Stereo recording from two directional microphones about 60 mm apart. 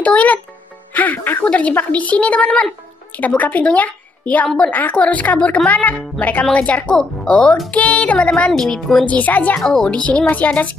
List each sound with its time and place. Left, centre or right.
0.0 s music: left
0.9 s a woman's voice: left; by 8.8 s centre
9.0 s a woman's voice: left
9.6 s speech: centre
9.8 s a woman's voice: centre